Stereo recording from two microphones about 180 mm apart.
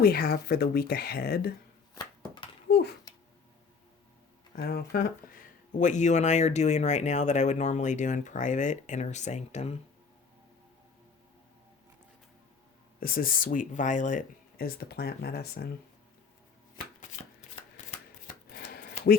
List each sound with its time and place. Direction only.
0.0 s speech: 55° left (ahead or behind)
2.6 s a sound: 60° left (ahead or behind)
4.5 s speech: 60° left (ahead or behind)
5.8 s speech: 40° left (ahead or behind)
13.0 s speech: 55° left (ahead or behind)
18.5 s a sound: 65° left (ahead or behind)